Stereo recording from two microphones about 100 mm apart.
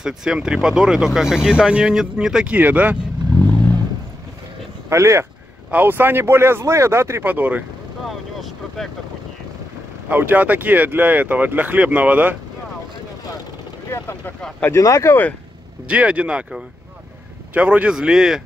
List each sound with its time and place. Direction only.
0.0 s speech: 5° right (ahead or behind)
4.8 s speech: 30° right (ahead or behind)
8.1 s vehicle: centre (ahead or behind)
10.0 s speech: 20° right (ahead or behind)
13.8 s speech: 25° left (ahead or behind)
15.9 s speech: 10° right (ahead or behind)